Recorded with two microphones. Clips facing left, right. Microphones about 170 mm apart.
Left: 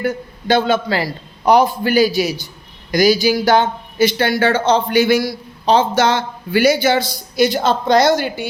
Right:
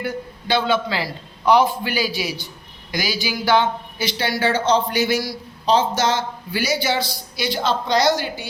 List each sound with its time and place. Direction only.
0.0 s a man's voice: 45° left (ahead or behind)